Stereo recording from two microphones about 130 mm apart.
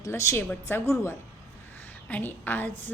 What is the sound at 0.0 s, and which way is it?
A woman's voice, 25° left (ahead or behind).